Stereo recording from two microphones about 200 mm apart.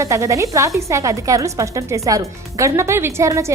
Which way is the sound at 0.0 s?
15° right (ahead or behind).